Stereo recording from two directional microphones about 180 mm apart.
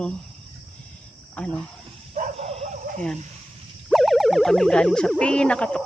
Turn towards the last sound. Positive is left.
turn(degrees=5)  # may be behind; listen again after turning